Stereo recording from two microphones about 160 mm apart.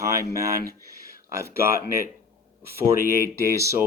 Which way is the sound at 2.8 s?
15° right (ahead or behind).